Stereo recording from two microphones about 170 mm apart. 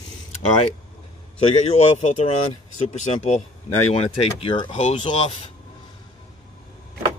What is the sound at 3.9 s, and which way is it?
Speech, 35° left (ahead or behind).